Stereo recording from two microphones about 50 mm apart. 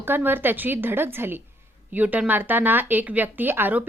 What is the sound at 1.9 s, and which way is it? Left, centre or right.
Speech, right.